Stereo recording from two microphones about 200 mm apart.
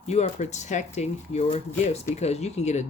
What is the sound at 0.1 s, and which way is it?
Speech, 35° left (ahead or behind).